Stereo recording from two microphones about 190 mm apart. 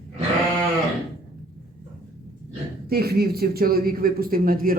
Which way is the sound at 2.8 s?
55° right (ahead or behind).